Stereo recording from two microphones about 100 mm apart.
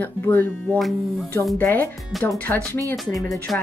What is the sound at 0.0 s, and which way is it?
Speech, 20° left (ahead or behind).